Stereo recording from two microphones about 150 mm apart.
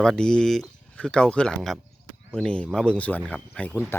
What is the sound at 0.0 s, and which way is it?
Speech, 5° left (ahead or behind).